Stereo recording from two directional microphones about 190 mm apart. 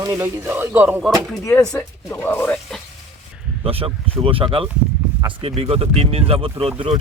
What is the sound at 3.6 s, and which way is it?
Speech, 30° right (ahead or behind).